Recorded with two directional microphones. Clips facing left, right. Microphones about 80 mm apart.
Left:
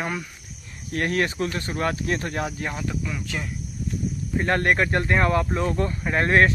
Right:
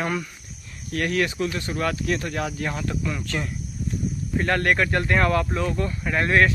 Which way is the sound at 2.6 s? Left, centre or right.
Centre.